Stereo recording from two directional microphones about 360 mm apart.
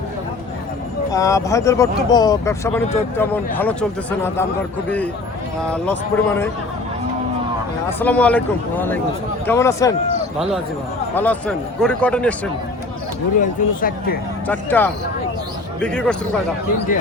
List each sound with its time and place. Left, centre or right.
1.1 s speech: centre
5.5 s speech: centre
7.9 s speech: centre
11.1 s speech: centre
13.4 s speech: left
14.4 s speech: centre